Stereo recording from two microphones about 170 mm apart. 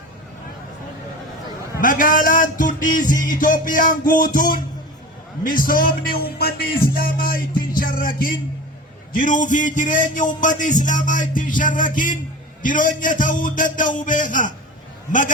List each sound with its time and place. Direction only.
1.8 s a man's voice: 55° left (ahead or behind)